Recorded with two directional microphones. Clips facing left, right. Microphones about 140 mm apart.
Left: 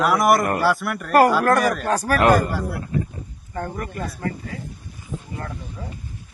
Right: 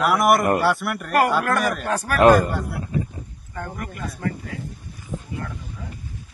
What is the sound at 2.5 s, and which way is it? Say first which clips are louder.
Speech: left 1 dB; centre (ahead or behind).